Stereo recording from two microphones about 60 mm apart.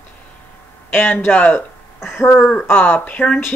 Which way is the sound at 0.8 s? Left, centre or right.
Left.